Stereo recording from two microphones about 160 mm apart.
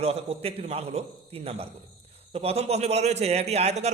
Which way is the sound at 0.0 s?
40° right (ahead or behind).